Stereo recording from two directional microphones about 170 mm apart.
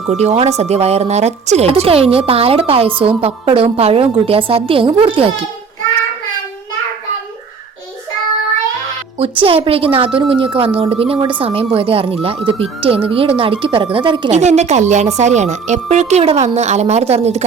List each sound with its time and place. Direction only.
0.1 s speech: 40° right (ahead or behind)
9.4 s speech: 35° right (ahead or behind)
14.3 s speech: 40° right (ahead or behind)